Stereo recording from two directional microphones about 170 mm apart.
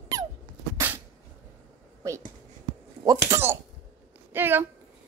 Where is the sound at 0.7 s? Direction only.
10° right (ahead or behind).